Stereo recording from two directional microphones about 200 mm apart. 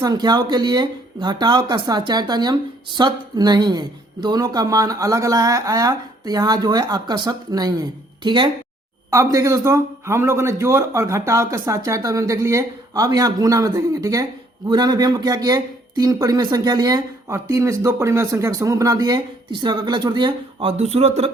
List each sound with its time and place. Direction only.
0.0 s speech: 20° right (ahead or behind)